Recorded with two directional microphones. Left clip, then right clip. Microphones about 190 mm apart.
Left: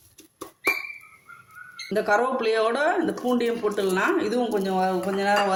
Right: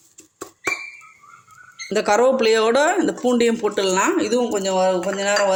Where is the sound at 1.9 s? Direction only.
45° right (ahead or behind).